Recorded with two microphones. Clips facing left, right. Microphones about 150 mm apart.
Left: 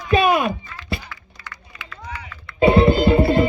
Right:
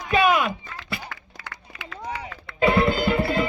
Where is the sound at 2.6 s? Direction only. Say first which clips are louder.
Left 6 dB; 25° left (ahead or behind).